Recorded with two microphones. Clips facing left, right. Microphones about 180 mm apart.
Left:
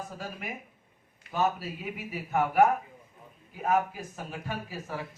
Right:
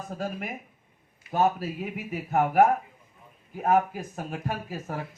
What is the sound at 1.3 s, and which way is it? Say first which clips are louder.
Speech: right 4 dB; 45° right (ahead or behind).